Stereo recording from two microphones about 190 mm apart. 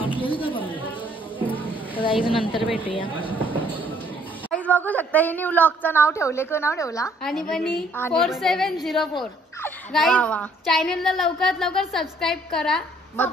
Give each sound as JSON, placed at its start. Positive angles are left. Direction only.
{"t": 0.0, "sound": "chatter", "side_deg": 25}
{"t": 2.0, "sound": "a woman's voice", "side_deg": 25}
{"t": 4.5, "sound": "a woman's voice", "side_deg": 10}
{"t": 7.2, "sound": "a woman's voice", "side_deg": 0}